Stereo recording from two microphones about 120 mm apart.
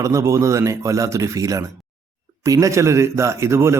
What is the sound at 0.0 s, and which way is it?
A man's voice, 25° right (ahead or behind).